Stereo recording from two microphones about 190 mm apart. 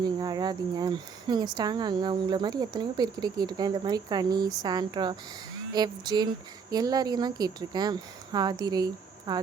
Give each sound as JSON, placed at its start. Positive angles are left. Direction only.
{"t": 0.0, "sound": "speech", "side_deg": -20}